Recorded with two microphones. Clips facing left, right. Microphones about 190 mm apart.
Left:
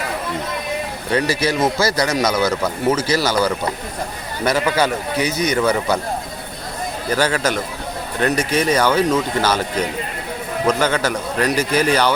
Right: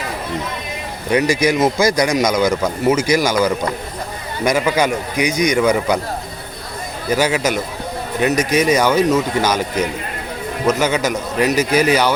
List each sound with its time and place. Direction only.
1.1 s a man's voice: 15° right (ahead or behind)
7.1 s a man's voice: 10° right (ahead or behind)
10.7 s a man's voice: 10° right (ahead or behind)